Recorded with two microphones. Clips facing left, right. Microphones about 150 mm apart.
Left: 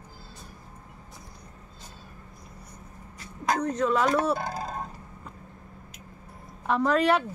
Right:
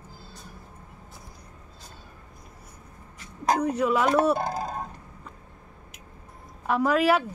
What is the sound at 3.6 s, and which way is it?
Speech, 10° right (ahead or behind).